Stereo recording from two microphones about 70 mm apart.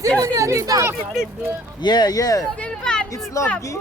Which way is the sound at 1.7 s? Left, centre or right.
Left.